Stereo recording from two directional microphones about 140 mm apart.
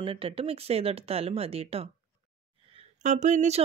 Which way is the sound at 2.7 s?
55° right (ahead or behind).